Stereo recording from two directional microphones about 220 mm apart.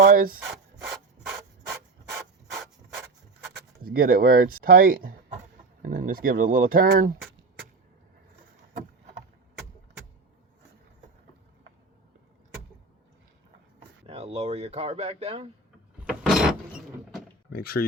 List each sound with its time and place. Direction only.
0.0 s rub: 40° right (ahead or behind)
0.3 s rub: 5° right (ahead or behind)
3.8 s speech: 40° right (ahead or behind)
14.1 s speech: 25° right (ahead or behind)
16.0 s mechanisms: 5° right (ahead or behind)
17.5 s speech: 45° left (ahead or behind)